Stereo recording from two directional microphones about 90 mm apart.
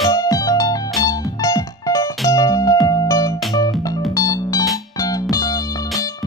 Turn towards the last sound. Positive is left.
turn(degrees=40)  # may be behind; listen again after turning